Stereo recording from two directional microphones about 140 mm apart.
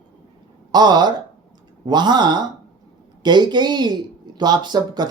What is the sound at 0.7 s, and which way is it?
Speech, 30° right (ahead or behind).